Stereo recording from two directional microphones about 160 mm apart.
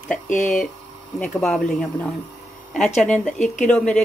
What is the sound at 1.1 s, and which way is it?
Speech, 5° left (ahead or behind).